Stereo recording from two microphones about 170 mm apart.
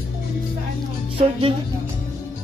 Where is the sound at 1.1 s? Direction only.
35° right (ahead or behind).